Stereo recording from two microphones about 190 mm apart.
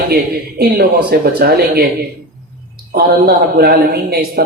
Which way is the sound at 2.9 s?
55° right (ahead or behind).